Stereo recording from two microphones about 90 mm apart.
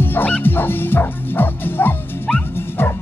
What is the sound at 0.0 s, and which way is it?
Music, 20° left (ahead or behind).